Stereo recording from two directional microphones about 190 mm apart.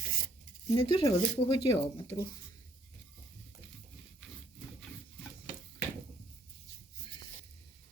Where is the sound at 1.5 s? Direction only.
20° left (ahead or behind).